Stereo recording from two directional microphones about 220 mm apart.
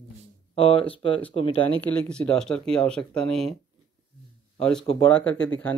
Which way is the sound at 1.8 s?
5° left (ahead or behind).